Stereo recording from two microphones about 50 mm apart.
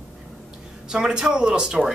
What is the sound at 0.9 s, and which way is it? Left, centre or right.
Speech, centre.